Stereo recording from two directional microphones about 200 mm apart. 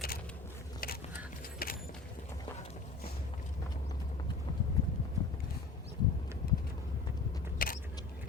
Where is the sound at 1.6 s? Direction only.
45° left (ahead or behind).